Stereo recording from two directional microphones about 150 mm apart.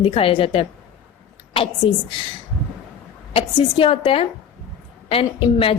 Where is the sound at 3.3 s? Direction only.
35° left (ahead or behind).